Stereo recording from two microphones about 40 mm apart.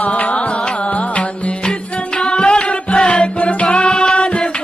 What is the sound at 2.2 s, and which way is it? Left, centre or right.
Music, left.